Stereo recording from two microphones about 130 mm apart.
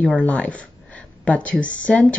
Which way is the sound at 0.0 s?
10° left (ahead or behind).